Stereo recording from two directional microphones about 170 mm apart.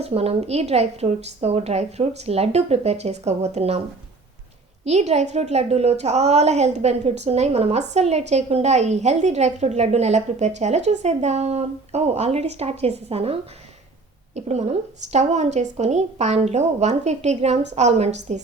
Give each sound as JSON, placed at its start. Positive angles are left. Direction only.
{"t": 0.0, "sound": "a woman's voice", "side_deg": -35}
{"t": 4.9, "sound": "a woman's voice", "side_deg": -40}